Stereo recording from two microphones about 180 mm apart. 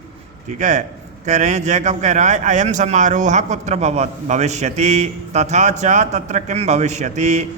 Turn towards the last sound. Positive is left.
turn(degrees=-40)  # may be behind; listen again after turning